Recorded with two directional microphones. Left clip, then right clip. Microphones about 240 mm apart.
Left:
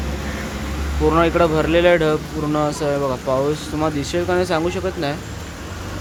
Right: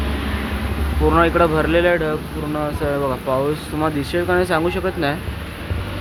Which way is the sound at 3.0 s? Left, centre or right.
Centre.